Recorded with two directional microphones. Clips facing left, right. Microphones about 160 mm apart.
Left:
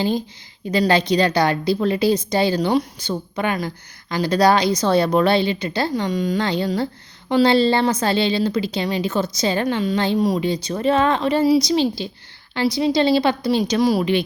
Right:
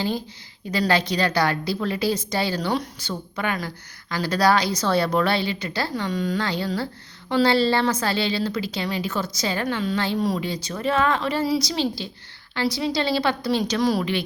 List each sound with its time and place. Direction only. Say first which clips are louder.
0.7 s a woman's voice: left 5 dB; 20° left (ahead or behind)